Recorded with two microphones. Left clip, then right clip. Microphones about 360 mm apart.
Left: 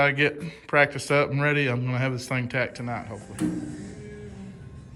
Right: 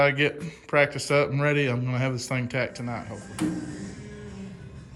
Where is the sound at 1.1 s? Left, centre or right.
Centre.